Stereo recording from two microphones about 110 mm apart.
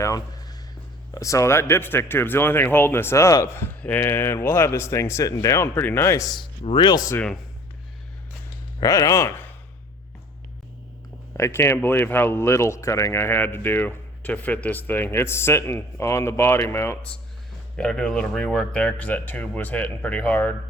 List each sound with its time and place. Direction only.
0.0 s a sound: 30° left (ahead or behind)
1.1 s speech: 30° left (ahead or behind)
6.7 s speech: 40° left (ahead or behind)
8.8 s speech: 30° left (ahead or behind)
11.3 s speech: 25° left (ahead or behind)
17.7 s speech: 5° left (ahead or behind)